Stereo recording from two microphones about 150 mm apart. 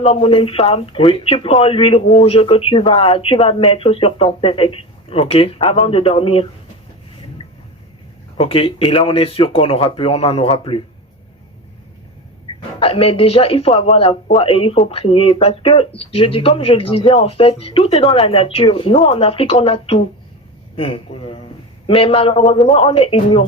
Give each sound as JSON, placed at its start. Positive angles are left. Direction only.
{"t": 0.0, "sound": "speech", "side_deg": 40}
{"t": 8.4, "sound": "speech", "side_deg": 40}
{"t": 12.8, "sound": "speech", "side_deg": 40}